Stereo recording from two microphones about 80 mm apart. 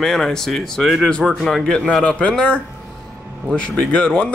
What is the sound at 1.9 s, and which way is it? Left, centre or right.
Speech, centre.